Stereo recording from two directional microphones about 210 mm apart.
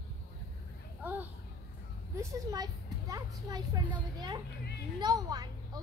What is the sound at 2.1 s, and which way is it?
A child's voice, 20° right (ahead or behind).